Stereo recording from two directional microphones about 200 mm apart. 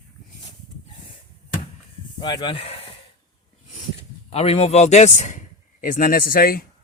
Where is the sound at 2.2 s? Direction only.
25° left (ahead or behind).